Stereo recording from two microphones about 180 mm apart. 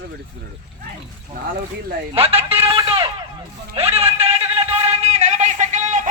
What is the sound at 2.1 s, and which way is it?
Speech, 35° right (ahead or behind).